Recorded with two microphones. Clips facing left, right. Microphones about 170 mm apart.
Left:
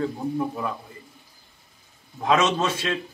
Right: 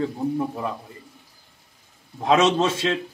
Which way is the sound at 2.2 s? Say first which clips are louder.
Right 3 dB; 30° right (ahead or behind).